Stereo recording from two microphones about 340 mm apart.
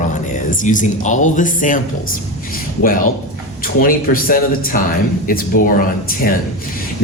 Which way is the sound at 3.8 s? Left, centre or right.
Left.